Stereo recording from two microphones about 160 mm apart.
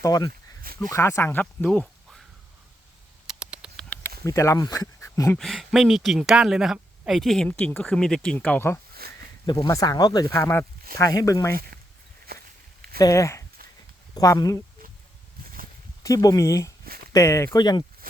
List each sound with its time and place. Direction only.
0.0 s speech: 25° left (ahead or behind); by 1.9 s 10° left (ahead or behind)
3.2 s rodents: 5° right (ahead or behind)
4.2 s speech: 20° left (ahead or behind)
5.4 s speech: centre (ahead or behind)
9.0 s a sound: 70° right (ahead or behind)
9.5 s speech: 25° left (ahead or behind)
12.3 s walk: 80° right
13.0 s speech: 20° left (ahead or behind)
16.0 s speech: 20° left (ahead or behind)
18.0 s a sound: 65° right (ahead or behind)